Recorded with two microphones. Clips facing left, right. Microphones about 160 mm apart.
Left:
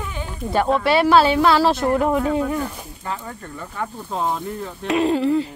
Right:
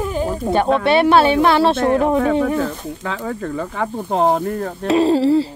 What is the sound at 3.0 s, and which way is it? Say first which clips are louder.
Speech: right 4 dB; 90° right.